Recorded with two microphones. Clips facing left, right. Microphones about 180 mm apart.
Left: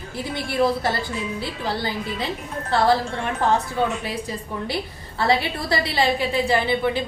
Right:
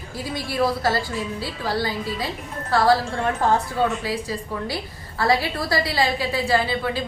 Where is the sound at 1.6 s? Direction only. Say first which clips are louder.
Right 2 dB; 25° left (ahead or behind).